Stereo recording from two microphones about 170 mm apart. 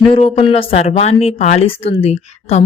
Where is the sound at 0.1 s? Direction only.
35° left (ahead or behind).